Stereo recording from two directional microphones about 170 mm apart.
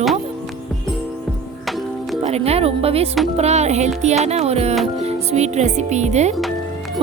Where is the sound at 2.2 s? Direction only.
40° right (ahead or behind).